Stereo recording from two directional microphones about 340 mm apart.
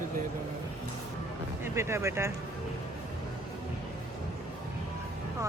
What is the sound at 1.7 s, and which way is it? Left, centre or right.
Speech, centre.